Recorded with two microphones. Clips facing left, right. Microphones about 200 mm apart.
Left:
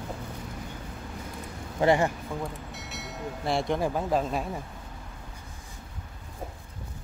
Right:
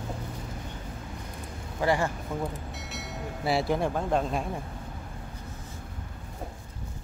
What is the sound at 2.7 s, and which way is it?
Speech, centre (ahead or behind).